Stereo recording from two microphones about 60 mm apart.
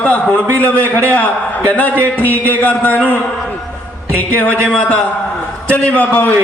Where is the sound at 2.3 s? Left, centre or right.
Left.